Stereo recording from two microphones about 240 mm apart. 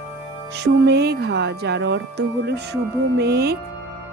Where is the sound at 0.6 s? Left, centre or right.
Right.